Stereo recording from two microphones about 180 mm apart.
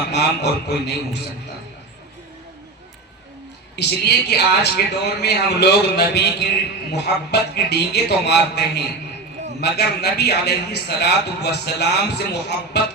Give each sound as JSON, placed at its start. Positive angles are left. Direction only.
{"t": 0.1, "sound": "a man's voice", "side_deg": 65}
{"t": 3.8, "sound": "a man's voice", "side_deg": 65}